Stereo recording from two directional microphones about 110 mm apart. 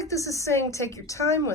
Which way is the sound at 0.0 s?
30° left (ahead or behind).